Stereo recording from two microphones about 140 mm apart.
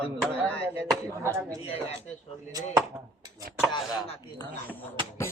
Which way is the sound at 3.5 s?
90° right.